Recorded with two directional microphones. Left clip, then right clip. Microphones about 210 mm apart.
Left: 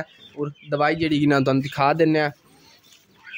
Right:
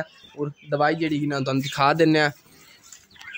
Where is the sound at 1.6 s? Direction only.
10° left (ahead or behind).